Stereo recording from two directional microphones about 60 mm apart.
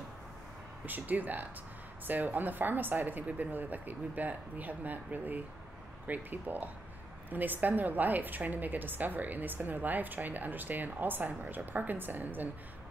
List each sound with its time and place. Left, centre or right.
0.8 s a woman's voice: right